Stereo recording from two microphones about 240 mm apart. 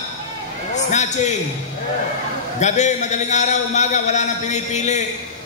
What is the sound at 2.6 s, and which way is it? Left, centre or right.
A man's voice, left.